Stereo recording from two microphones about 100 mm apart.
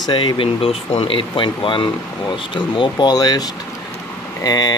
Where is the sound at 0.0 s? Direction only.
50° left (ahead or behind).